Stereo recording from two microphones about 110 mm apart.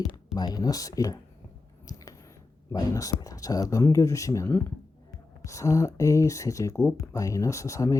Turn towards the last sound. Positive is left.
turn(degrees=30)  # may be behind; listen again after turning